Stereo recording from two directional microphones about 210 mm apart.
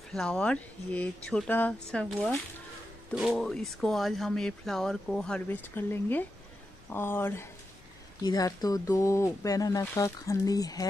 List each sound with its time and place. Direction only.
0.1 s speech: centre (ahead or behind)